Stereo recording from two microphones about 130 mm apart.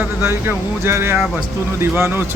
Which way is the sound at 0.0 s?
15° right (ahead or behind).